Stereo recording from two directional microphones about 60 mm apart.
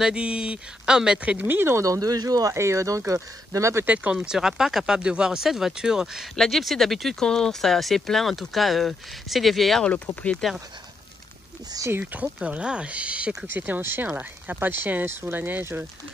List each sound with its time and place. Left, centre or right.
0.0 s speech: centre
1.4 s speech: right
1.7 s speech: right
2.5 s speech: right
3.8 s speech: right
6.3 s speech: centre
9.8 s speech: left
12.0 s speech: right
13.5 s speech: right